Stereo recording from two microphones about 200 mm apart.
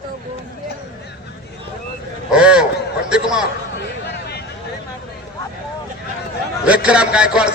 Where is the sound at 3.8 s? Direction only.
55° left (ahead or behind).